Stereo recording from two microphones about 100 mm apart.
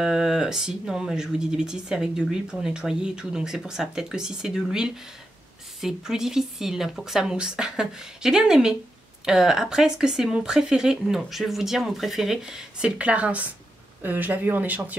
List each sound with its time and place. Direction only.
0.0 s speech: 5° right (ahead or behind)